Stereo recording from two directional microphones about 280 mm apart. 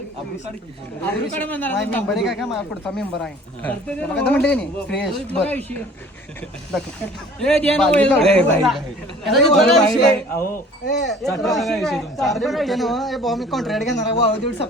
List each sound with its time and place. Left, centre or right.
1.0 s speech: centre
7.3 s speech: centre
13.9 s speech: left